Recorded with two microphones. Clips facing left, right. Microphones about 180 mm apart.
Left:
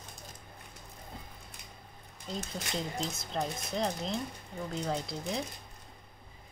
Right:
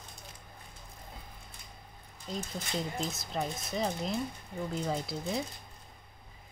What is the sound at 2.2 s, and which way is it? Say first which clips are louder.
Speech: even; centre (ahead or behind).